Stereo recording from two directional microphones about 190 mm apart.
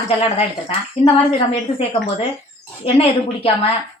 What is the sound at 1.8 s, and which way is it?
Speech, 30° left (ahead or behind).